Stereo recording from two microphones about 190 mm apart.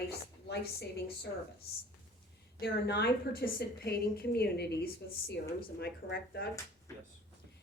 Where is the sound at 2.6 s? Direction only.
60° left (ahead or behind).